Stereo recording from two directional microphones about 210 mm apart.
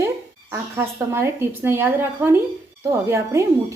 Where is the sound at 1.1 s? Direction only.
10° right (ahead or behind).